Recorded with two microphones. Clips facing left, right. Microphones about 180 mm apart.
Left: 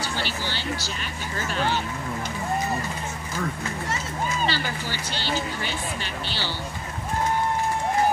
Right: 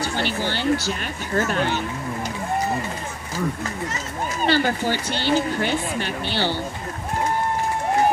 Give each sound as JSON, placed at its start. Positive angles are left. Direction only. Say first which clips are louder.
{"t": 0.0, "sound": "speech", "louder": "right 5 dB", "side_deg": -55}
{"t": 4.5, "sound": "speech", "louder": "right 9 dB", "side_deg": -55}